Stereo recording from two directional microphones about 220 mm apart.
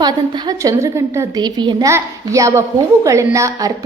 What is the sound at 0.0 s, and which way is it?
A woman's voice, 20° right (ahead or behind).